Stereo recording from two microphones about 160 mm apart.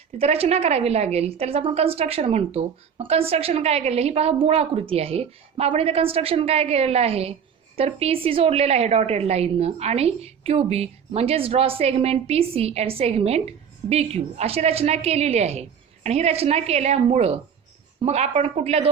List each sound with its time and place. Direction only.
0.2 s a woman's voice: 40° right (ahead or behind)